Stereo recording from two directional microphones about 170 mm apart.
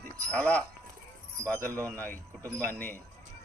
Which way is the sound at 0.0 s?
10° left (ahead or behind).